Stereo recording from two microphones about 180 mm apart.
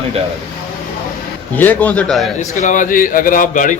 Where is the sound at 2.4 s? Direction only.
45° left (ahead or behind).